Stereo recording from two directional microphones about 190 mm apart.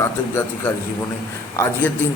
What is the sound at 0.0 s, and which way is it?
A man's voice, 15° left (ahead or behind).